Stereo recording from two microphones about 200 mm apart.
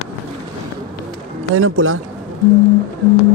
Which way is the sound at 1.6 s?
85° right.